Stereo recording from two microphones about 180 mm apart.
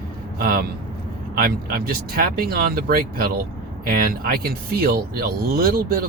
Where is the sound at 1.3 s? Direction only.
55° right (ahead or behind).